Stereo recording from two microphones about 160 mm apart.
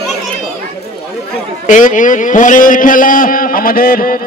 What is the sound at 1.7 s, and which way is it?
A man's voice, 55° left (ahead or behind).